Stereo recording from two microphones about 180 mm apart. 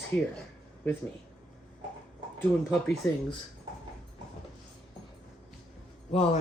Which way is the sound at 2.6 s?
Centre (ahead or behind).